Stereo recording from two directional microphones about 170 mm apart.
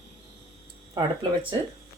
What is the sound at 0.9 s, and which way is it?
Speech, 30° right (ahead or behind).